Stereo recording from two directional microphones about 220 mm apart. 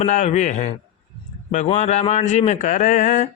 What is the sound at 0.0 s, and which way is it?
A man's voice, 30° left (ahead or behind).